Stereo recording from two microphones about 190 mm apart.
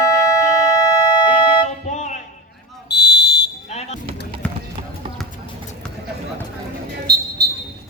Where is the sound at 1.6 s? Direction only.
35° left (ahead or behind).